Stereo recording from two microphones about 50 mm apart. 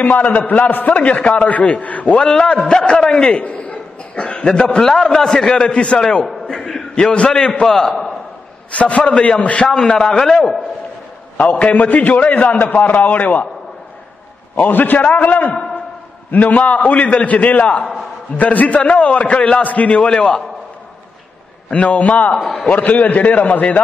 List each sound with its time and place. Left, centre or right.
0.0 s a man's voice: left
1.4 s a man's voice: left
2.1 s a man's voice: centre
7.6 s a man's voice: centre
8.7 s a man's voice: left; by 10.6 s centre
11.5 s a man's voice: left
14.5 s a man's voice: left; by 20.4 s centre
21.7 s a man's voice: left